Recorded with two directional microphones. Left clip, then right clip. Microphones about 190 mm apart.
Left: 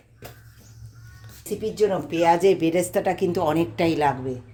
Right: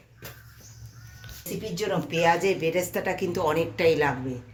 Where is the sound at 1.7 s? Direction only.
60° left (ahead or behind).